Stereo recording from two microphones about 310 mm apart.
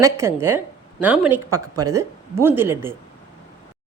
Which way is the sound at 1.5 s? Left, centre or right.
Right.